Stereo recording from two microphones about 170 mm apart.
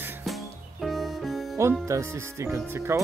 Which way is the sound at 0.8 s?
Centre (ahead or behind).